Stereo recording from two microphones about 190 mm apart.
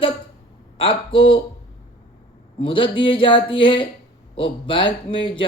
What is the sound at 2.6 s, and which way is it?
Speech, 25° left (ahead or behind).